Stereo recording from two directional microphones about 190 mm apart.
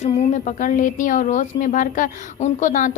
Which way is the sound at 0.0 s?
40° left (ahead or behind).